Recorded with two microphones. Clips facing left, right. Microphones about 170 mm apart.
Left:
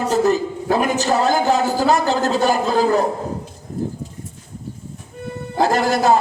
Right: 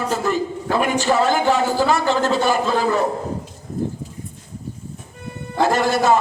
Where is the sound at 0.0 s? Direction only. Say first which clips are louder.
Left 4 dB; 40° left (ahead or behind).